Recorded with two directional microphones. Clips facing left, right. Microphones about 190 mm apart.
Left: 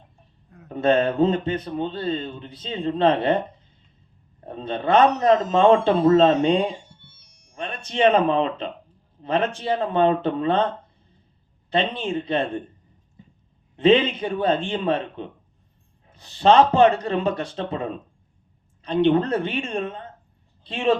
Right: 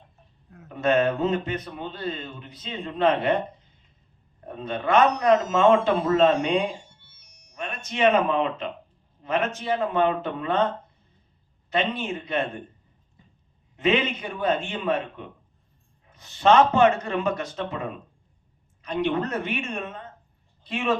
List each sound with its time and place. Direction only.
0.7 s a man's voice: 30° left (ahead or behind)
4.4 s a man's voice: 30° left (ahead or behind)
11.7 s a man's voice: 30° left (ahead or behind)
13.7 s a man's voice: 30° left (ahead or behind)